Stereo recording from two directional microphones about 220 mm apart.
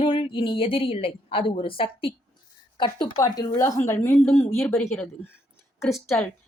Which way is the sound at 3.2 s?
15° left (ahead or behind).